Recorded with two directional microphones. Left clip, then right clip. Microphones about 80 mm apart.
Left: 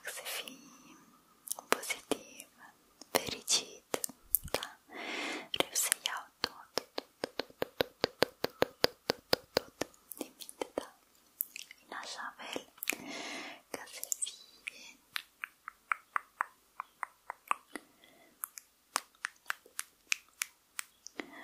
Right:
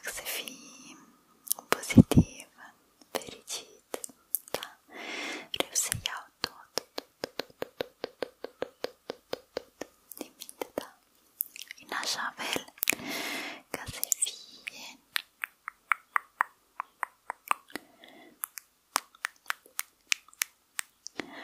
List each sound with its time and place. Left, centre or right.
0.0 s whispering: centre
3.0 s whispering: centre
4.5 s whispering: centre
7.7 s a sound: centre
8.2 s a sound: left
10.1 s whispering: centre
11.9 s whispering: right